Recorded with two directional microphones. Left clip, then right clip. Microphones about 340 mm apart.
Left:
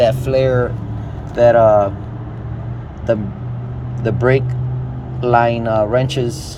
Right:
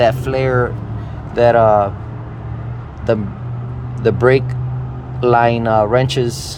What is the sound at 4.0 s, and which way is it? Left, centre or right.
Speech, centre.